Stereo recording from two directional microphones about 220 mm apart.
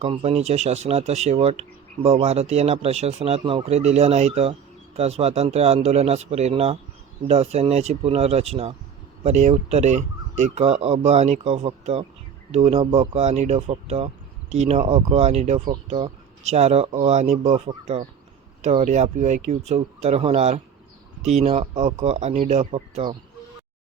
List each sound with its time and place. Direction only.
0.0 s speech: 25° right (ahead or behind)